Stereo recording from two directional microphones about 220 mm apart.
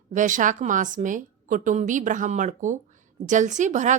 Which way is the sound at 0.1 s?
35° right (ahead or behind).